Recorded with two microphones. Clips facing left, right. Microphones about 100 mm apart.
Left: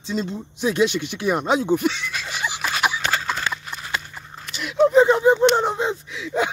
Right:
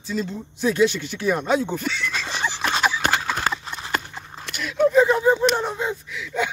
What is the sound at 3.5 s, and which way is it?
Clip-clop, 45° right (ahead or behind).